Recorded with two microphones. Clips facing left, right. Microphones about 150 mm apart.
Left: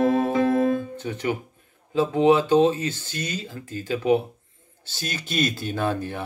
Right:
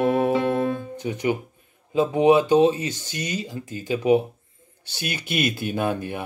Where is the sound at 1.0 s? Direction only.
15° right (ahead or behind).